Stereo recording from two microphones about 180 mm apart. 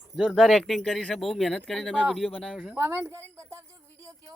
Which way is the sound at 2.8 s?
15° right (ahead or behind).